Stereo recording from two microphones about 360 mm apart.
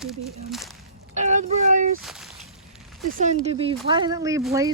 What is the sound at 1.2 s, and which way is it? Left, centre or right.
Speech, centre.